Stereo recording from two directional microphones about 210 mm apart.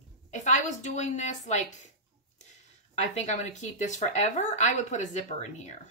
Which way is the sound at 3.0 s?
35° left (ahead or behind).